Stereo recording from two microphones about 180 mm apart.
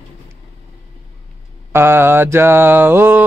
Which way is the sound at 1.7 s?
15° right (ahead or behind).